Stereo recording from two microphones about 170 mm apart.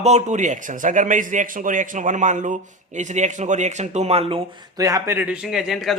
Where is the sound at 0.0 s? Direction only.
40° right (ahead or behind).